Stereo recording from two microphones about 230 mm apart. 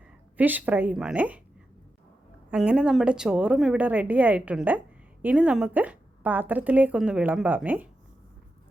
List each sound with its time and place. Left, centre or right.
0.3 s a woman's voice: centre
2.5 s a woman's voice: centre